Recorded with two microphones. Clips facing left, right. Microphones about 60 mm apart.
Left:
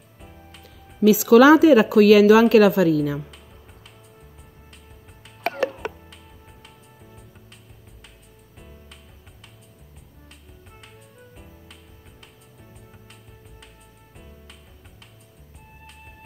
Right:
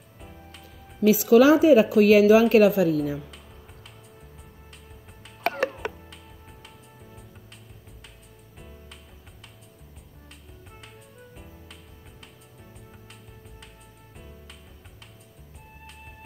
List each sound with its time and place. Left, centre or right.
0.2 s music: centre
1.1 s a woman's voice: left
11.1 s music: centre